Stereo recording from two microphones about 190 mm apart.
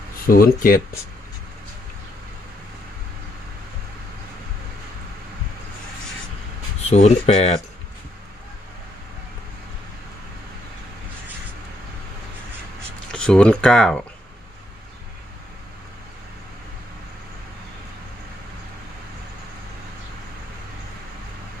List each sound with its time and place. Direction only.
0.3 s speech: 50° left (ahead or behind)
6.9 s speech: 35° left (ahead or behind)
13.1 s speech: 5° left (ahead or behind)